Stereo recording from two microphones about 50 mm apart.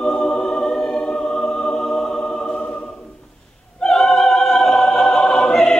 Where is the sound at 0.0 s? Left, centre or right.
Centre.